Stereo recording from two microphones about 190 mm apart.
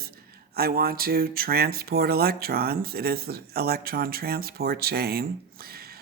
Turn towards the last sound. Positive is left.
turn(degrees=-55)  # may be behind; listen again after turning